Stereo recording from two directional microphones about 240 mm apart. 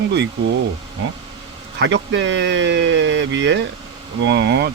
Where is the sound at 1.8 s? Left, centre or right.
Right.